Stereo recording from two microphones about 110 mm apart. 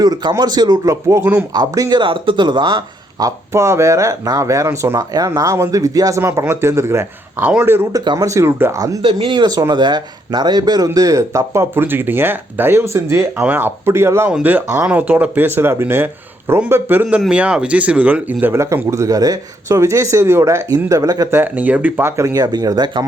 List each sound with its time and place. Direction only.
0.0 s speech: 40° right (ahead or behind)
1.2 s speech: 15° right (ahead or behind)
1.5 s speech: 35° right (ahead or behind)
2.0 s speech: 50° right (ahead or behind)
3.2 s speech: 25° right (ahead or behind)
7.9 s speech: 35° right (ahead or behind)
8.3 s speech: 25° right (ahead or behind)
9.0 s speech: 50° right (ahead or behind); by 14.3 s 25° right (ahead or behind)
14.3 s speech: 15° right (ahead or behind); by 21.2 s 35° right (ahead or behind)
21.2 s speech: 20° right (ahead or behind); by 23.0 s 35° right (ahead or behind)